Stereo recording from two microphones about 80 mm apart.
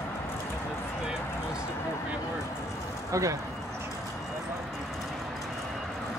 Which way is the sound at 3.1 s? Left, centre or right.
Right.